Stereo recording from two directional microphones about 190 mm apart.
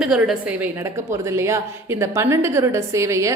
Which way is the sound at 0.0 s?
5° right (ahead or behind).